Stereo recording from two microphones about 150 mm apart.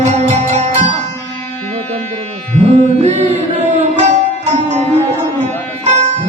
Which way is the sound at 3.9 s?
50° right (ahead or behind).